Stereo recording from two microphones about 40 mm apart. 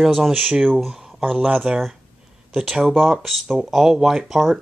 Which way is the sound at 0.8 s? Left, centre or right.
Centre.